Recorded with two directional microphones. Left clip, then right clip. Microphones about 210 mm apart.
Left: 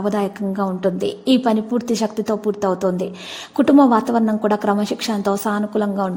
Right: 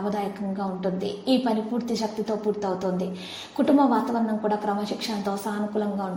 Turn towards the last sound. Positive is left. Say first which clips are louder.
# left 7 dB
turn(degrees=45)  # may be behind; listen again after turning